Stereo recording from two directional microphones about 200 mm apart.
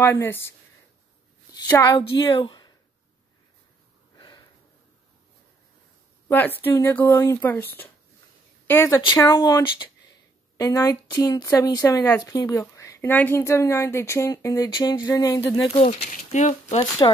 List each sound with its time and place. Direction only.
0.0 s a woman's voice: 10° left (ahead or behind)
4.2 s sniff: 20° left (ahead or behind)
6.2 s a woman's voice: 10° left (ahead or behind)
15.7 s speech: 30° left (ahead or behind)
16.6 s speech: 20° left (ahead or behind)